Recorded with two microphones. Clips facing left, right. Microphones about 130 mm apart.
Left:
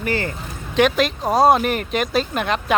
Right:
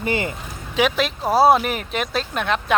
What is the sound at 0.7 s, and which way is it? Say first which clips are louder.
Speech: left 3 dB; centre (ahead or behind).